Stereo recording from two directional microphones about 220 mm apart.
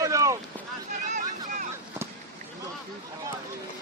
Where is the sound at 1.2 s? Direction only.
35° right (ahead or behind).